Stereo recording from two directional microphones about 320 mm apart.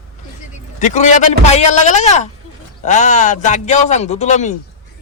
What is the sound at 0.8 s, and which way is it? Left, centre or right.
Speech, left.